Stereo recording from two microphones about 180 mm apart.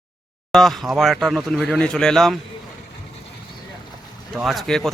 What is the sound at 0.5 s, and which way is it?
Speech, centre (ahead or behind).